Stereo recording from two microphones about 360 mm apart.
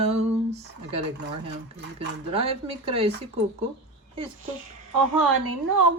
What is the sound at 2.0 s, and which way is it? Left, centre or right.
Music, centre.